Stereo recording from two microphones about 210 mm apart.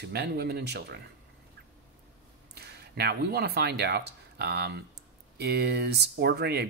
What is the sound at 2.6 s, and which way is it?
Speech, 50° right (ahead or behind).